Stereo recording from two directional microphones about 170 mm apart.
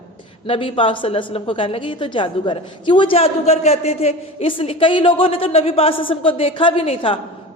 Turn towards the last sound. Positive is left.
turn(degrees=35)  # may be behind; listen again after turning